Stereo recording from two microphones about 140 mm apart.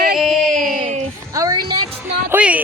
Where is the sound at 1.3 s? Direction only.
25° right (ahead or behind).